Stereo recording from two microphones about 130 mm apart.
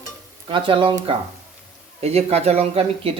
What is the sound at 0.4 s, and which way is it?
Speech, 40° right (ahead or behind).